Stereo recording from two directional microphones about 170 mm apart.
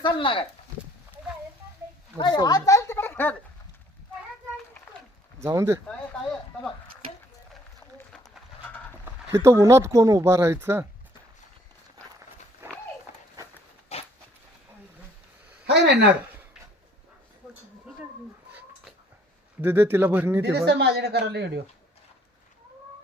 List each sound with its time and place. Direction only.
0.0 s speech: 30° left (ahead or behind)
2.1 s speech: 25° left (ahead or behind)
5.4 s speech: 15° right (ahead or behind)
9.0 s speech: 15° right (ahead or behind)
12.6 s horse: 15° right (ahead or behind)
13.1 s a sound: 45° left (ahead or behind)
13.9 s dog: 35° left (ahead or behind)
15.6 s speech: 75° right (ahead or behind)
19.6 s speech: 10° right (ahead or behind)
20.4 s speech: 90° right